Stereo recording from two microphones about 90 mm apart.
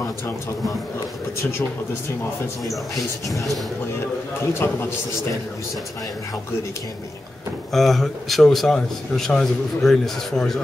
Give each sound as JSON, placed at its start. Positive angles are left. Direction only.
{"t": 4.4, "sound": "a man's voice", "side_deg": 25}
{"t": 7.7, "sound": "speech", "side_deg": 0}